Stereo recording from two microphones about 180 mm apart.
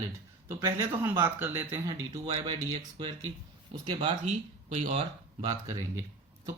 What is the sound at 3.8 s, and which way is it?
Speech, 25° right (ahead or behind).